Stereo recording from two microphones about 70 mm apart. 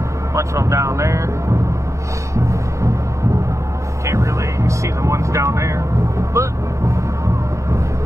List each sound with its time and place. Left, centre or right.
0.3 s speech: right
2.3 s music: right
4.0 s vehicle: right